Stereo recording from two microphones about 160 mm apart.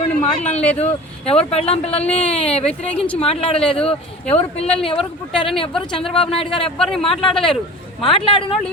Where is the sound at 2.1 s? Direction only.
10° left (ahead or behind).